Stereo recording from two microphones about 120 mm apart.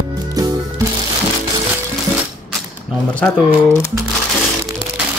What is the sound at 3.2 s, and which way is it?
Speech, 25° left (ahead or behind).